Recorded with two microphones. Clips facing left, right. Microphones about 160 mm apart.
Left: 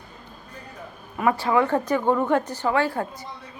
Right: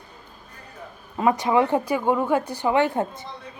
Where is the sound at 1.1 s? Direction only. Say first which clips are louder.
Right 1 dB; 20° right (ahead or behind).